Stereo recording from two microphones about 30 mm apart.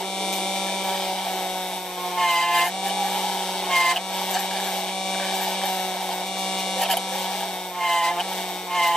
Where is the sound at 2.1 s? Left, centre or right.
Centre.